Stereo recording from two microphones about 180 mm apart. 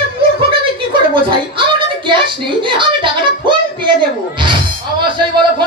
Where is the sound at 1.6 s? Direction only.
25° right (ahead or behind).